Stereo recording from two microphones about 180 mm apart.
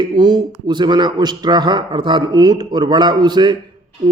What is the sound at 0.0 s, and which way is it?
A man's voice, 25° right (ahead or behind).